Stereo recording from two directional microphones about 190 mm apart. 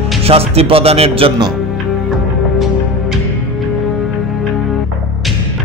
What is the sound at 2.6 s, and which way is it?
Music, centre (ahead or behind).